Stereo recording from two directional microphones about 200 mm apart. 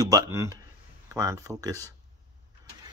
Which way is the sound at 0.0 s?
20° right (ahead or behind).